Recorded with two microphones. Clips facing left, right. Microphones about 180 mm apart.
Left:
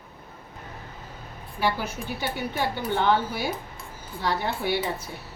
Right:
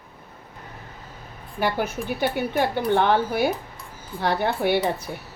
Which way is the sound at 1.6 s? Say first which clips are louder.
Right 3 dB; 55° right (ahead or behind).